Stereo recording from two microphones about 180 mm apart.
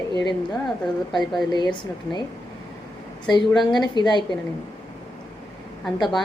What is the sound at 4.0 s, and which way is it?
Speech, 25° left (ahead or behind).